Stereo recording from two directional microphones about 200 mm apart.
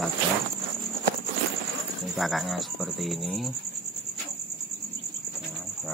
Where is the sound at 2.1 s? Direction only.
Centre (ahead or behind).